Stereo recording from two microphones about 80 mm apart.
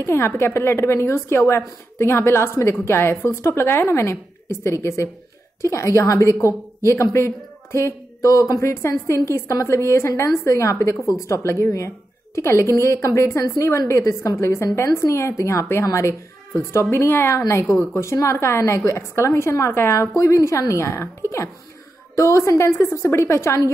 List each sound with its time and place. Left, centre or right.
0.0 s a woman's voice: left
22.1 s a woman's voice: left